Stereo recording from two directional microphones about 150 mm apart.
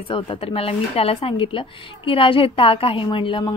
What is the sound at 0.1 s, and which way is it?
Speech, 35° left (ahead or behind).